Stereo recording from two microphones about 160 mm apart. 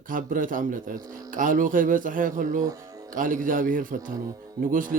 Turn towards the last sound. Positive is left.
turn(degrees=-55)  # may be behind; listen again after turning